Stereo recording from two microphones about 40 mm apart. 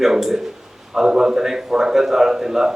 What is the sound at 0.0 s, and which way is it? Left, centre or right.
A man's voice, centre.